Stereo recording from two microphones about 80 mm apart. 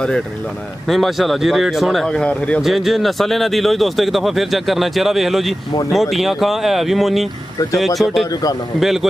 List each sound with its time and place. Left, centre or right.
0.8 s speech: centre
2.6 s speech: centre